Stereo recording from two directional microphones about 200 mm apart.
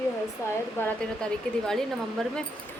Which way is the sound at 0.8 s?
10° left (ahead or behind).